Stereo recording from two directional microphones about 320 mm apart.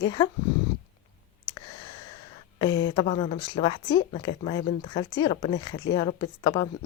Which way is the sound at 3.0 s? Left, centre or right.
Centre.